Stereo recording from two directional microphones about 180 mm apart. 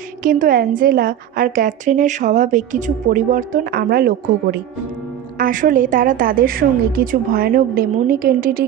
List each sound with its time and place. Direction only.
0.2 s a woman's voice: 50° right (ahead or behind)